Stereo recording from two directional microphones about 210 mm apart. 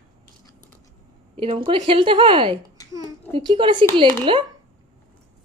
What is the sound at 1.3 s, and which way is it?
A woman's voice, 25° right (ahead or behind).